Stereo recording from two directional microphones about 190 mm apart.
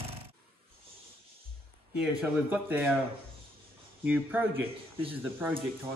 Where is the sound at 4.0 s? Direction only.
5° right (ahead or behind).